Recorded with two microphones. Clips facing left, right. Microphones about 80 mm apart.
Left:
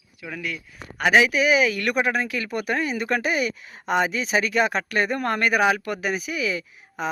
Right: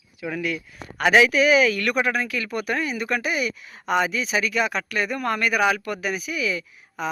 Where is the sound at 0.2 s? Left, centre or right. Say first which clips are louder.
Right 5 dB; centre.